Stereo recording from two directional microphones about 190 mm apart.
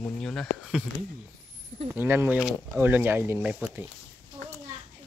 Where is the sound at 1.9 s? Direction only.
10° right (ahead or behind).